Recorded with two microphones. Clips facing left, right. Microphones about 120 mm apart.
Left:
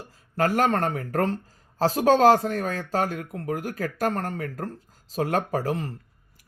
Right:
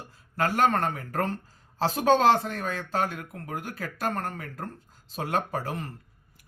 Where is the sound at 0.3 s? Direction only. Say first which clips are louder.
Left 2 dB; 40° left (ahead or behind).